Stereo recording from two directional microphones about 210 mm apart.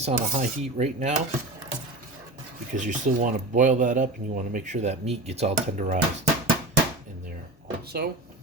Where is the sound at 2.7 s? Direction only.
35° right (ahead or behind).